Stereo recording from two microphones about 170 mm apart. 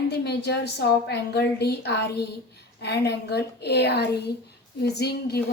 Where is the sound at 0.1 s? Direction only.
75° left (ahead or behind).